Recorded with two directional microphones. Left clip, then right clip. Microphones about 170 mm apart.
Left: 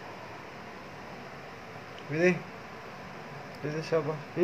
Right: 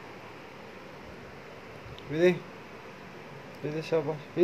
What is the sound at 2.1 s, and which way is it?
Speech, 20° right (ahead or behind).